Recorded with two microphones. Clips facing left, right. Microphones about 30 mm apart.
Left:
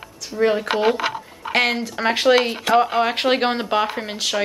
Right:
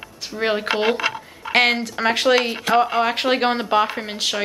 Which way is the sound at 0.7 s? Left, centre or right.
Right.